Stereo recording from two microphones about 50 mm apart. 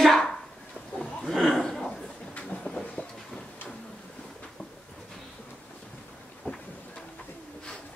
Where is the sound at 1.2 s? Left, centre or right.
Centre.